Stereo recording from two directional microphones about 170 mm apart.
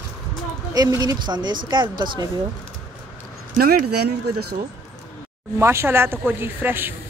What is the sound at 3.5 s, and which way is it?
Speech, 60° right (ahead or behind).